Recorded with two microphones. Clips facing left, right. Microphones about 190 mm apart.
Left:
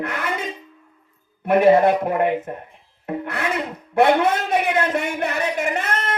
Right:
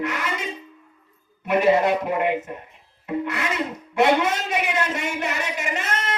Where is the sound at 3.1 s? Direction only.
55° left (ahead or behind).